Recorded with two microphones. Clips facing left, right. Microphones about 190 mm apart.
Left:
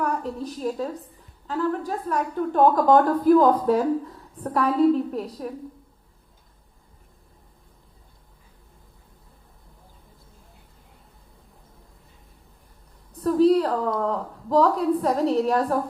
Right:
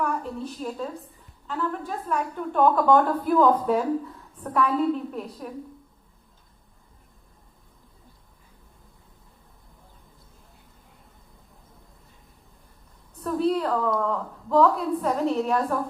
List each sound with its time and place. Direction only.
0.0 s a woman's voice: 40° left (ahead or behind)
13.2 s a woman's voice: 35° left (ahead or behind)